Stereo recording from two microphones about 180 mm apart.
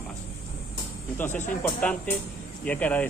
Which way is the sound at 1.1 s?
10° left (ahead or behind).